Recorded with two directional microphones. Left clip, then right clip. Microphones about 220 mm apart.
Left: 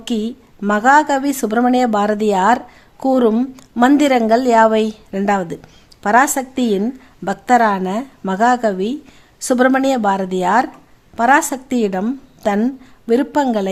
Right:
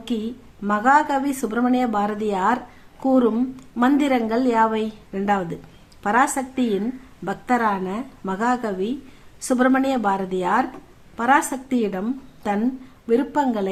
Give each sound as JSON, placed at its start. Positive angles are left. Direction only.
{"t": 0.0, "sound": "a woman's voice", "side_deg": 40}